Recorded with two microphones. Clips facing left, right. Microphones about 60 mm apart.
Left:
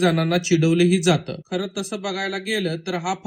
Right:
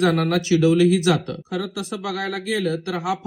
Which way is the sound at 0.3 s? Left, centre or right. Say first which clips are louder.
Right 1 dB; right.